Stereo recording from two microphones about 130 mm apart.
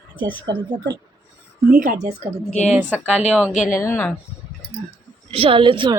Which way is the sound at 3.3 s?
10° right (ahead or behind).